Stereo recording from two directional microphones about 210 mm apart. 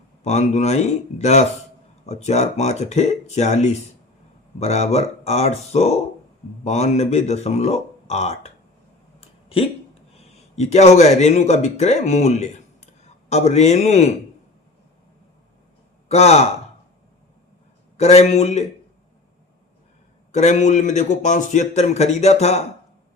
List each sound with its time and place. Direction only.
0.2 s a man's voice: 30° left (ahead or behind)
10.2 s a man's voice: 30° left (ahead or behind)
16.0 s speech: 30° left (ahead or behind)
17.9 s a man's voice: 30° left (ahead or behind)
20.3 s a man's voice: 35° left (ahead or behind)